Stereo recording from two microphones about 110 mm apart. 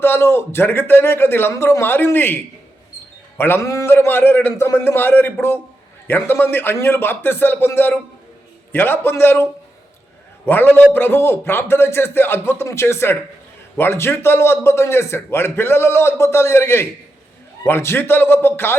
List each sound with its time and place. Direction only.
0.0 s a man's voice: 20° left (ahead or behind)